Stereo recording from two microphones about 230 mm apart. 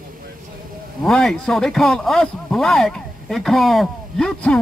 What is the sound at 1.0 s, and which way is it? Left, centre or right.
Speech, centre.